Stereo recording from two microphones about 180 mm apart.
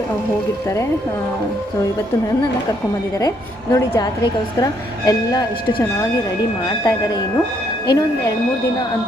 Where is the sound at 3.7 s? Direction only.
20° left (ahead or behind).